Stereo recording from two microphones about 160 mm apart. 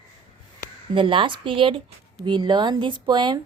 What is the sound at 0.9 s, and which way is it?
A woman's voice, 30° right (ahead or behind).